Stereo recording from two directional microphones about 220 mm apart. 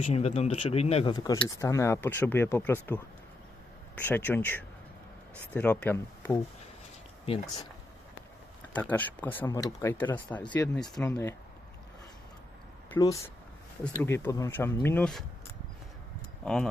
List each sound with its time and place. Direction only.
0.0 s speech: 30° left (ahead or behind)
8.7 s speech: 5° left (ahead or behind)
12.9 s speech: 15° left (ahead or behind)